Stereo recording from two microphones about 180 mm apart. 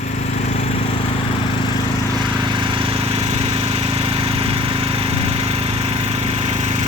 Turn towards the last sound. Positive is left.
turn(degrees=-30)  # may be behind; listen again after turning